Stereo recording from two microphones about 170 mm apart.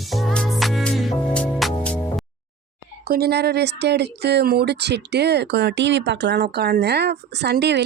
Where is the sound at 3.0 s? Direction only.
65° right (ahead or behind).